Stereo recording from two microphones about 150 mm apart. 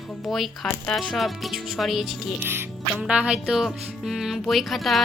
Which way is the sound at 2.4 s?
15° right (ahead or behind).